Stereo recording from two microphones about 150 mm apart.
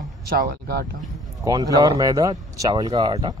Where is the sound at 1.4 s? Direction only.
25° right (ahead or behind).